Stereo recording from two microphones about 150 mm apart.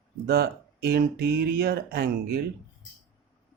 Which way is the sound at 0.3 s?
90° right.